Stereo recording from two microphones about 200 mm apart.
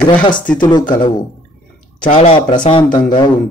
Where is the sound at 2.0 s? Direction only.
30° left (ahead or behind).